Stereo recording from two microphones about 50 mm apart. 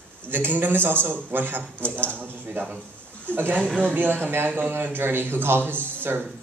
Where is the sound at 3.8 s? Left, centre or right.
Right.